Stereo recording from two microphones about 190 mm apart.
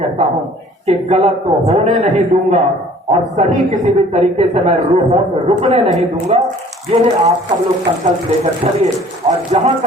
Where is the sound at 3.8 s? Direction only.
35° right (ahead or behind).